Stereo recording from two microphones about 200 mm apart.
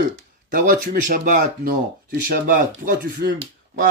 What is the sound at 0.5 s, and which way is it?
Speech, 45° right (ahead or behind).